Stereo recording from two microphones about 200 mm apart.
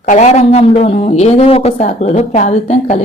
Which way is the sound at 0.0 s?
35° left (ahead or behind).